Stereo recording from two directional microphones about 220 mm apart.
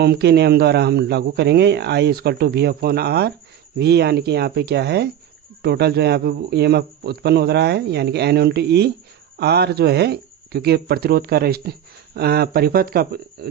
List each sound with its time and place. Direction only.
0.0 s speech: 45° right (ahead or behind)